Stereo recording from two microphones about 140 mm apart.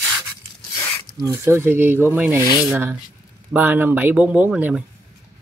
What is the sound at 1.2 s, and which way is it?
Speech, 20° right (ahead or behind).